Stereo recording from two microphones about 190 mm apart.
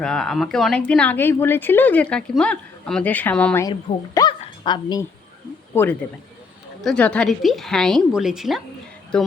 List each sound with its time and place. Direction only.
0.0 s a woman's voice: 5° left (ahead or behind); by 5.0 s 20° left (ahead or behind)
5.7 s a woman's voice: 10° left (ahead or behind)